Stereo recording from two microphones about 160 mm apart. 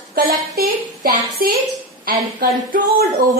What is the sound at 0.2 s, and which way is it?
Speech, 70° right (ahead or behind).